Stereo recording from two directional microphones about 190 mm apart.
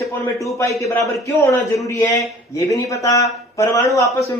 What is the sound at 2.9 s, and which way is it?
Speech, 15° left (ahead or behind).